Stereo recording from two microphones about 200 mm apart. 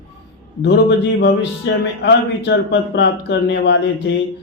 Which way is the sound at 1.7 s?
65° left (ahead or behind).